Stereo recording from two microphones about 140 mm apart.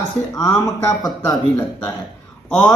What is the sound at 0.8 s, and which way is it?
Speech, 25° left (ahead or behind).